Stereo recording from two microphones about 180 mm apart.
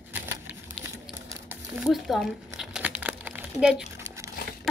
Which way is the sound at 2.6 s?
5° right (ahead or behind).